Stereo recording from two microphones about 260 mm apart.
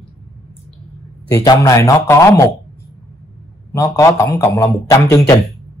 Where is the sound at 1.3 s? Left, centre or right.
Centre.